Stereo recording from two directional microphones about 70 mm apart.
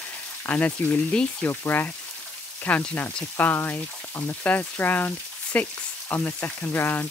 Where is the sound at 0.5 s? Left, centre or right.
Left.